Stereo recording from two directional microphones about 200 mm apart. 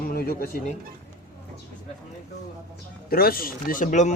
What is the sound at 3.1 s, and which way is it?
Speech, 50° left (ahead or behind).